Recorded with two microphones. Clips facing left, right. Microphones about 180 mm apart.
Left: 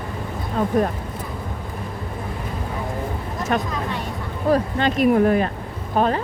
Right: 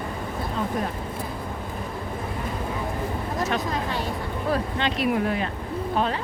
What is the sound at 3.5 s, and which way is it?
A woman's voice, 50° left (ahead or behind).